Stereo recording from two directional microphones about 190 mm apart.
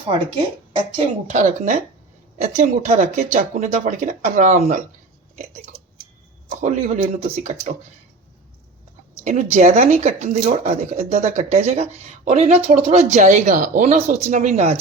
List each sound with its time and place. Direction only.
0.9 s speech: 40° right (ahead or behind)
6.5 s speech: 40° right (ahead or behind)
9.2 s speech: 40° right (ahead or behind)